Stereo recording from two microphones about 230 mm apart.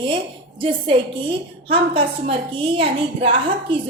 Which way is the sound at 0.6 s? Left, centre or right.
Right.